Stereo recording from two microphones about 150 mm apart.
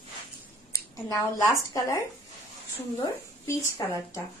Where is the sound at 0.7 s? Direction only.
20° left (ahead or behind).